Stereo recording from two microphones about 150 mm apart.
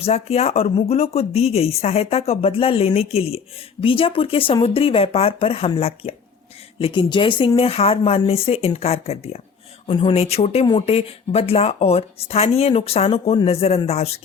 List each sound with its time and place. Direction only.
0.0 s speech: 45° left (ahead or behind)
9.8 s speech: 35° left (ahead or behind)